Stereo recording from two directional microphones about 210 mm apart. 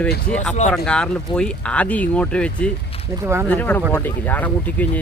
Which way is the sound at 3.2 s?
10° right (ahead or behind).